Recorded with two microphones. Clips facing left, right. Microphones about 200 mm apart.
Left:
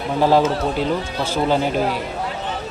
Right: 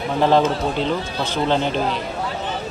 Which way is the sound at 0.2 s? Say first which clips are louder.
Left 1 dB; 5° left (ahead or behind).